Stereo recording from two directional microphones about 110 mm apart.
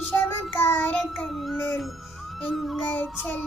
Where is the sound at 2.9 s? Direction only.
15° left (ahead or behind).